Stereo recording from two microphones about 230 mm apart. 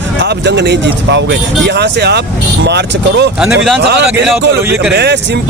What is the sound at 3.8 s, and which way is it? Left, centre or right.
Speech, right.